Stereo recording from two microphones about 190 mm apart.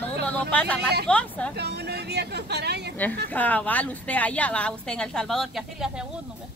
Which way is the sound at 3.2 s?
10° left (ahead or behind).